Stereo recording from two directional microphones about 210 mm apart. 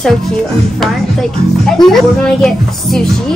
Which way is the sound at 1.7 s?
Centre (ahead or behind).